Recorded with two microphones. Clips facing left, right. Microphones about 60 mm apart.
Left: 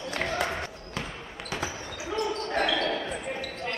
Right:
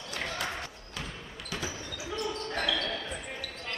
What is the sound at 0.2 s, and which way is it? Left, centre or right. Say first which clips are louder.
Basketball bounce: left 5 dB; left.